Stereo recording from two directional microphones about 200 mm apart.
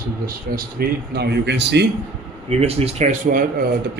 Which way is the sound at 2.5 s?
30° right (ahead or behind).